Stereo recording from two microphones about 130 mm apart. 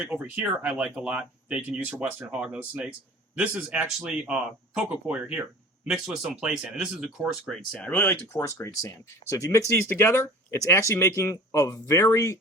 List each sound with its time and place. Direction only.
0.0 s speech: 15° right (ahead or behind)
7.7 s speech: 10° left (ahead or behind)